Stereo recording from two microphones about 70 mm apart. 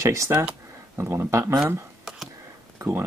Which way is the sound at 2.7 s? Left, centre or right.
Right.